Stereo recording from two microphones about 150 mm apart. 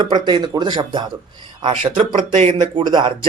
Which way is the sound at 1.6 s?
45° right (ahead or behind).